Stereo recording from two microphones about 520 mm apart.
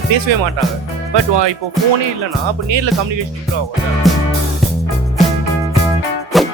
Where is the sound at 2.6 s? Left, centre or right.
Right.